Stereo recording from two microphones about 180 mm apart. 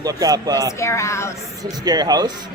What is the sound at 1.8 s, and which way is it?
Speech, 20° right (ahead or behind).